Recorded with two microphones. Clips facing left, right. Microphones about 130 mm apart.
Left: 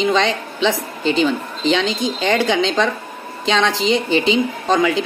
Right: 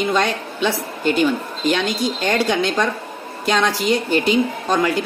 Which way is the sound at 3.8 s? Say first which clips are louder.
Left 1 dB; 50° right (ahead or behind).